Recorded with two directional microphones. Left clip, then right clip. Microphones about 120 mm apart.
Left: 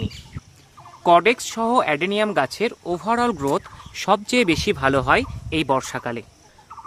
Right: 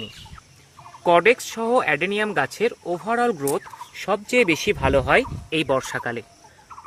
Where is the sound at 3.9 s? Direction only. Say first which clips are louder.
Left 5 dB; 45° left (ahead or behind).